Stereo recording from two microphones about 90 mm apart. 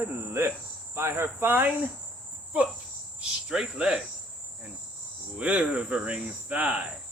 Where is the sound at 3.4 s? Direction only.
5° right (ahead or behind).